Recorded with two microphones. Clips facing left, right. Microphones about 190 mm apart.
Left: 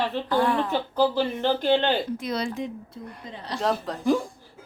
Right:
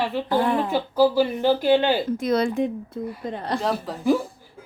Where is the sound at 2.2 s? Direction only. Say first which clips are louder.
Right 7 dB; 50° right (ahead or behind).